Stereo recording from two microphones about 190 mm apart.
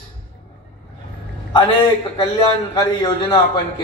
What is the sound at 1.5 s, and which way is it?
A man's voice, 25° left (ahead or behind).